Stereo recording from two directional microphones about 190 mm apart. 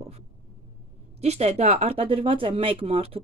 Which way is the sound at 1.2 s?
35° right (ahead or behind).